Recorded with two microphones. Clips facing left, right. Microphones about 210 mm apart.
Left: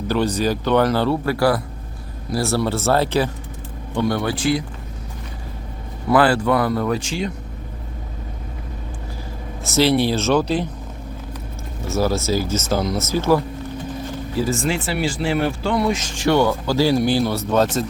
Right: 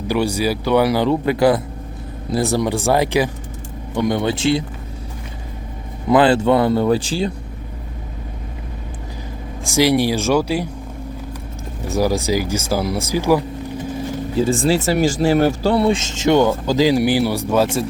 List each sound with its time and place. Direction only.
0.1 s speech: 10° right (ahead or behind)
6.1 s speech: 20° right (ahead or behind)
9.6 s speech: 15° right (ahead or behind)
11.9 s speech: 15° right (ahead or behind)
14.3 s speech: 30° right (ahead or behind); by 17.8 s 10° right (ahead or behind)